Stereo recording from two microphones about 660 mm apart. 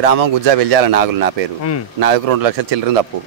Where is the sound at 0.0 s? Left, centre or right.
Right.